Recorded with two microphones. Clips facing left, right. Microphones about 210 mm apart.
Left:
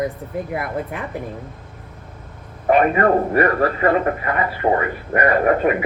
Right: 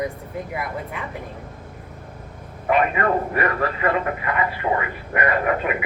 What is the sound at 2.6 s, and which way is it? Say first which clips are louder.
A man's voice: left 5 dB; 40° left (ahead or behind).